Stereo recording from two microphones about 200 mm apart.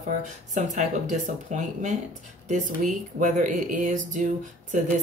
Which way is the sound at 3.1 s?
40° right (ahead or behind).